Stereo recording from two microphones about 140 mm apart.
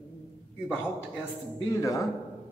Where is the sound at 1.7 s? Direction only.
25° left (ahead or behind).